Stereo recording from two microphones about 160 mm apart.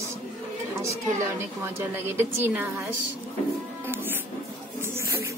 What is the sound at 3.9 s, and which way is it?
Music, 15° right (ahead or behind).